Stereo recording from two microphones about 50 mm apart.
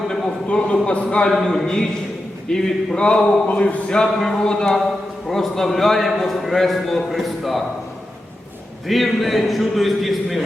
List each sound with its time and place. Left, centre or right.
0.4 s speech: left
1.3 s speech: centre
3.9 s a man's voice: centre
8.9 s a man's voice: centre